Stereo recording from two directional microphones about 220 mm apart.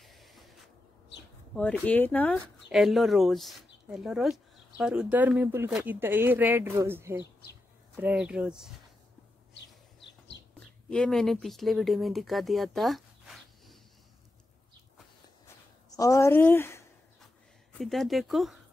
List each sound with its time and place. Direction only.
0.0 s spray: centre (ahead or behind)
1.5 s speech: 5° left (ahead or behind)
9.5 s a sound: 50° left (ahead or behind)
10.9 s speech: 5° left (ahead or behind)
16.0 s speech: 15° left (ahead or behind)